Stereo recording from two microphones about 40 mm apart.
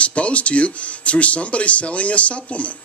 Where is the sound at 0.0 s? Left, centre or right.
Left.